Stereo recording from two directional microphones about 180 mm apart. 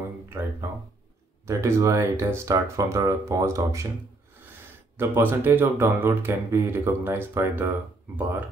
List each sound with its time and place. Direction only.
0.3 s speech: 15° right (ahead or behind)
4.9 s speech: 10° right (ahead or behind)